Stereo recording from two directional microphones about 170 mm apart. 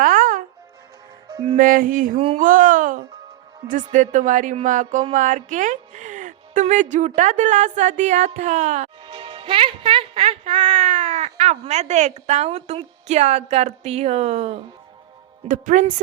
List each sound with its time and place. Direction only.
0.0 s music: 50° right (ahead or behind)
1.5 s music: 55° right (ahead or behind)
5.1 s a woman's voice: 50° right (ahead or behind)
15.4 s music: 50° right (ahead or behind)